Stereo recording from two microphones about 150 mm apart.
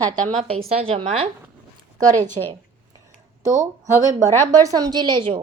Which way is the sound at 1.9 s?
55° right (ahead or behind).